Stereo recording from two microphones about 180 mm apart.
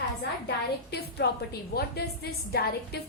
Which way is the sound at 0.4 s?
70° left (ahead or behind).